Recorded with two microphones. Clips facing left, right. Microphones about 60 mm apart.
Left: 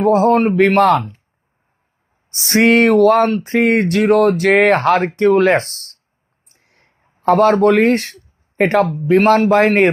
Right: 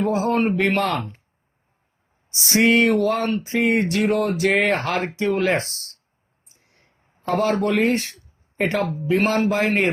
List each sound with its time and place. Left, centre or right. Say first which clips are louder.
0.0 s speech: left 8 dB; left
2.3 s speech: left 5 dB; left
6.5 s a sound: left 3 dB; left
8.9 s speech: left 8 dB; left